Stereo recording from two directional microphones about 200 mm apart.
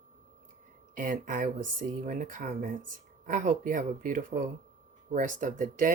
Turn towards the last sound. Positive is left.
turn(degrees=-40)  # may be behind; listen again after turning